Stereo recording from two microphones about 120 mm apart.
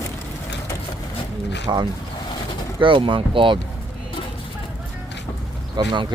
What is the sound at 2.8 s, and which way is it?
Speech, 45° right (ahead or behind).